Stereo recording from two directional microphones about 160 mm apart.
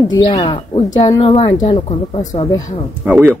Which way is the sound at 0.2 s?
30° left (ahead or behind).